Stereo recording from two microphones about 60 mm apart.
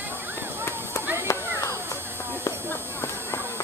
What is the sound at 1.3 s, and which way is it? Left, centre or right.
Children playing, left.